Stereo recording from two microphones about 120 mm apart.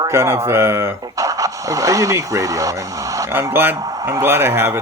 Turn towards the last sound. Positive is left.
turn(degrees=-20)  # may be behind; listen again after turning